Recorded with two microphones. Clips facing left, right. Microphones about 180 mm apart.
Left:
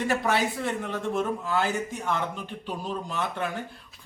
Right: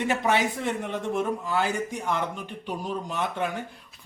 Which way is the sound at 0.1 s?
20° right (ahead or behind).